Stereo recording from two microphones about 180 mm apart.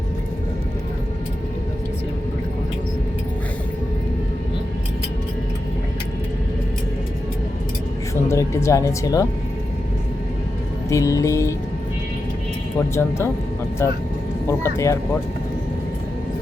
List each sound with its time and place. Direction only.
8.1 s speech: 15° left (ahead or behind)
10.8 s music: 15° left (ahead or behind)
12.9 s music: 15° left (ahead or behind)